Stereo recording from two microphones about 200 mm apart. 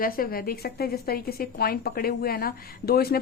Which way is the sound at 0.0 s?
45° left (ahead or behind).